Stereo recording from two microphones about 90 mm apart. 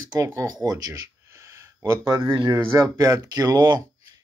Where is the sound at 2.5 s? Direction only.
30° right (ahead or behind); by 3.8 s 50° right (ahead or behind).